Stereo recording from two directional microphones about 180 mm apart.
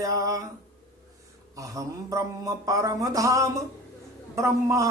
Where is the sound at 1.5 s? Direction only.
20° right (ahead or behind).